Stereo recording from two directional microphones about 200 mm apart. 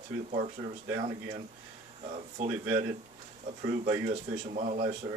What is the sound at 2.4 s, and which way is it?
Speech, 40° right (ahead or behind).